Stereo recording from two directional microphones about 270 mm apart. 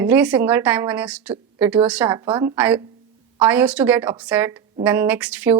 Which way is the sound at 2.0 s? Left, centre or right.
Centre.